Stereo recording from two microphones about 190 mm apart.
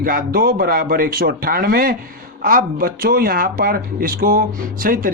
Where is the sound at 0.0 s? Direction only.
50° right (ahead or behind).